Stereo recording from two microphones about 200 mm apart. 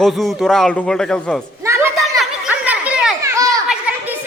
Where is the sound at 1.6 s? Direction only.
15° right (ahead or behind).